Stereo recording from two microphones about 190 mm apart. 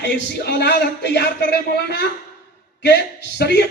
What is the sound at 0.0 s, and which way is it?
A man's voice, 60° left (ahead or behind).